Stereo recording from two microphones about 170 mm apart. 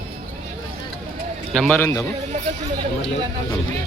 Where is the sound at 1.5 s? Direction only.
5° left (ahead or behind).